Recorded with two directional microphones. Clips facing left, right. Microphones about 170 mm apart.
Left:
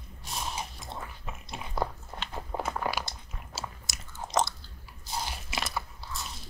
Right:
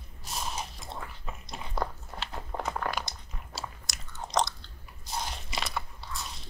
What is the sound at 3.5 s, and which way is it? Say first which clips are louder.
Chewing: even; centre (ahead or behind).